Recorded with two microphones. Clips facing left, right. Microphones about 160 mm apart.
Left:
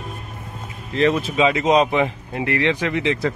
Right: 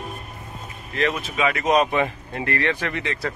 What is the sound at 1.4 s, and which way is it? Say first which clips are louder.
Speech: left 2 dB; 20° left (ahead or behind).